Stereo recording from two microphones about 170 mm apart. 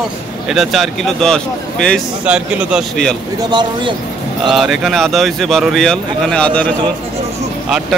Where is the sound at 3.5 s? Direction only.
25° right (ahead or behind).